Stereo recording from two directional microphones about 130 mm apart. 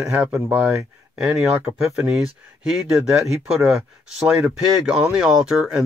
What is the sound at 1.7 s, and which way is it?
Speech, 5° right (ahead or behind).